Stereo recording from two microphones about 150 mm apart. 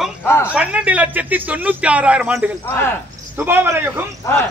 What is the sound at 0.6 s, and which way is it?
A man's voice, 10° right (ahead or behind).